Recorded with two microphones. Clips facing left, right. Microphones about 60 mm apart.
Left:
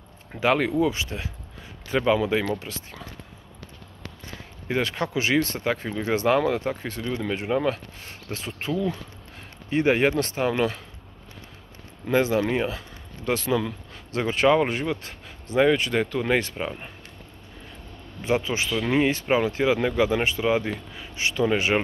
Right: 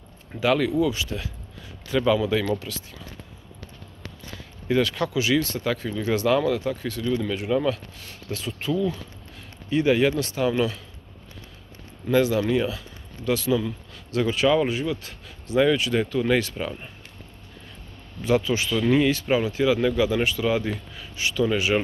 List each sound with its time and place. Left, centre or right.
0.3 s speech: left
4.6 s speech: left
12.1 s speech: left
18.2 s speech: left
18.9 s speech: left